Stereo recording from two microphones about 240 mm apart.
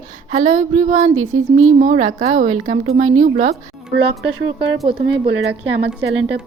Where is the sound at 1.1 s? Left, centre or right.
Right.